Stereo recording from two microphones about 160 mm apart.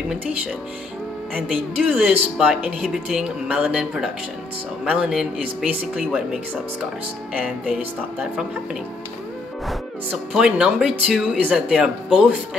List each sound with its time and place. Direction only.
1.3 s speech: 5° right (ahead or behind)
10.3 s speech: 5° right (ahead or behind)